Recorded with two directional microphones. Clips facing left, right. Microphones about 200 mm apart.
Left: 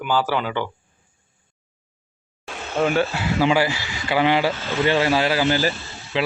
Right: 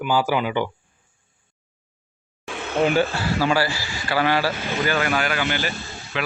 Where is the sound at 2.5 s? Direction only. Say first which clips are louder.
Right 3 dB; 55° right (ahead or behind).